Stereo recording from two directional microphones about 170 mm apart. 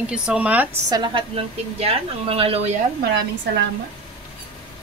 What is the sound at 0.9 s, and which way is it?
A woman's voice, 30° right (ahead or behind).